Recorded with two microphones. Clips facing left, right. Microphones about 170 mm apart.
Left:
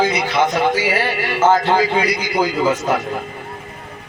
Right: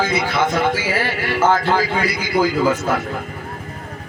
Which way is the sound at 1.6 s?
20° left (ahead or behind).